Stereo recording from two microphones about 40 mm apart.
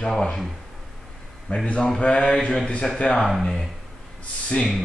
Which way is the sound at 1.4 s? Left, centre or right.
Left.